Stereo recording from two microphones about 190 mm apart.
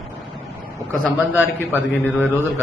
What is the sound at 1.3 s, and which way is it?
Speech, 10° right (ahead or behind).